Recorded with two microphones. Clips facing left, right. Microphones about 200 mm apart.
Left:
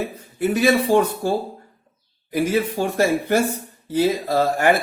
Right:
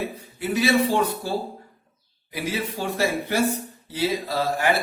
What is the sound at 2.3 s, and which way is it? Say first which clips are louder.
Speech: left 8 dB; 50° left (ahead or behind).